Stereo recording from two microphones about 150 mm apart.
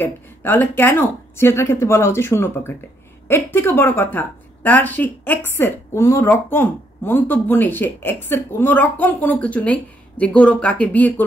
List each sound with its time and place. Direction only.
0.0 s a woman's voice: 15° left (ahead or behind)